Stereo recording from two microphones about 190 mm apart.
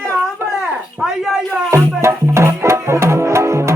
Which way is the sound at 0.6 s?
Centre (ahead or behind).